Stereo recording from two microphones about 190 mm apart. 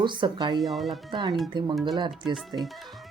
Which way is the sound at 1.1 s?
20° right (ahead or behind).